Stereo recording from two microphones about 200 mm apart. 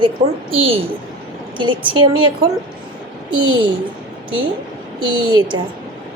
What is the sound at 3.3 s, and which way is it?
Speech, 25° right (ahead or behind).